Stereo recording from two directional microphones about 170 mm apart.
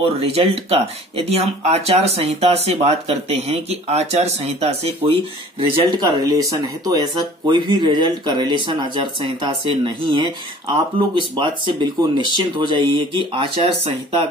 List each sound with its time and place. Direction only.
0.0 s speech: 35° right (ahead or behind)
5.7 s speech: 25° right (ahead or behind)